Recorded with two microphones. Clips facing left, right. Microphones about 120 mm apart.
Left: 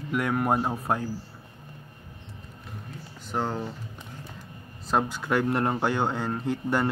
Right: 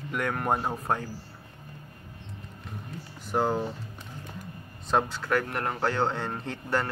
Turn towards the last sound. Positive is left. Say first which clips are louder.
# left 4 dB
turn(degrees=10)  # may be behind; listen again after turning